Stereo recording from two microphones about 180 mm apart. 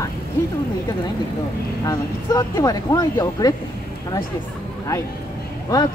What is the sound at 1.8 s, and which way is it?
Speech, 20° left (ahead or behind).